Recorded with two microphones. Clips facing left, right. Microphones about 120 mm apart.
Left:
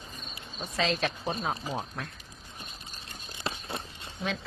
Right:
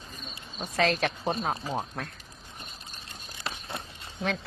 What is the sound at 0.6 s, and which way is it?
Speech, 55° right (ahead or behind).